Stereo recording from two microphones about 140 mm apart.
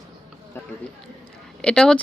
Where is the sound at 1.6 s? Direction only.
5° left (ahead or behind).